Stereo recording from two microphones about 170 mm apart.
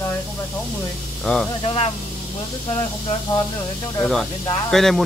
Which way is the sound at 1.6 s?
35° left (ahead or behind).